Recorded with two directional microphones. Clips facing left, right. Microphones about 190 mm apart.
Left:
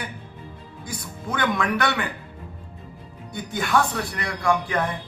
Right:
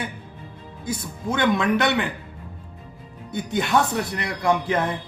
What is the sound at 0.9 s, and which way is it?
A man's voice, 25° right (ahead or behind).